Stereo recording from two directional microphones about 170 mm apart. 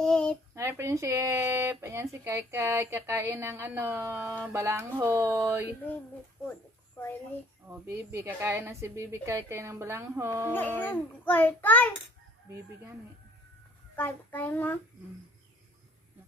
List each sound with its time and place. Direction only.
0.0 s a sound: 5° left (ahead or behind)
0.6 s a woman's voice: 15° right (ahead or behind)
7.9 s a woman's voice: 15° right (ahead or behind)
10.5 s a child's voice: 10° left (ahead or behind)
13.9 s a child's voice: 10° left (ahead or behind)